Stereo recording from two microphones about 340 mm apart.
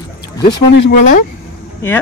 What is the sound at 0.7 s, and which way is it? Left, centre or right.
Speech, left.